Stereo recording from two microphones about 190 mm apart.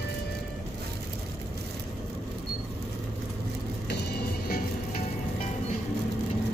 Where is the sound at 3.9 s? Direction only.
55° left (ahead or behind).